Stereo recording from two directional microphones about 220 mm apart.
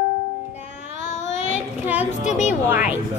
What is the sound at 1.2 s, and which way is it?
Child singing, 30° left (ahead or behind).